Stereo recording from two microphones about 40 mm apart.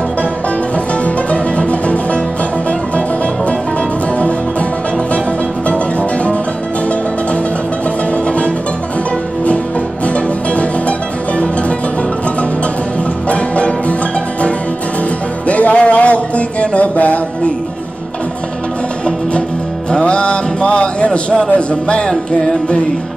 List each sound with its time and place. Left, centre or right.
1.0 s music: left
5.7 s music: left
8.3 s music: left
10.0 s music: left
13.3 s music: left
15.4 s music: left
20.0 s a sound: left
21.5 s speech: left